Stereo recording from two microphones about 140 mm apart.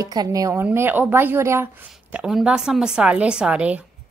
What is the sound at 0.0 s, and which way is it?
Speech, 25° right (ahead or behind).